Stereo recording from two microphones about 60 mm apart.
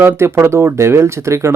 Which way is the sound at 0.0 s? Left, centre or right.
Right.